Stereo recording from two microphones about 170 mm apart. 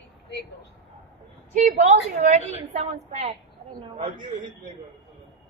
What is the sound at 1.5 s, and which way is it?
A woman's voice, 50° right (ahead or behind).